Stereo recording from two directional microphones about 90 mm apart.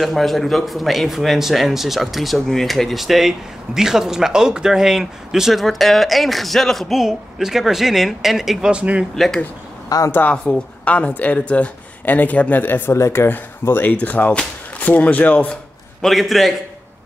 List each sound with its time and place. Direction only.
0.0 s a man's voice: centre (ahead or behind)
9.1 s a man's voice: 5° left (ahead or behind)
9.8 s a woman's voice: 40° left (ahead or behind)
10.1 s a woman's voice: 15° left (ahead or behind)
16.0 s a man's voice: centre (ahead or behind)